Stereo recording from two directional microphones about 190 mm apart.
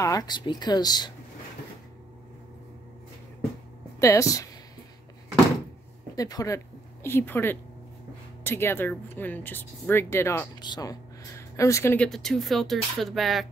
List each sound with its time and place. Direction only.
0.0 s speech: 20° left (ahead or behind)
4.0 s speech: 15° left (ahead or behind)
6.1 s speech: 20° left (ahead or behind); by 13.5 s centre (ahead or behind)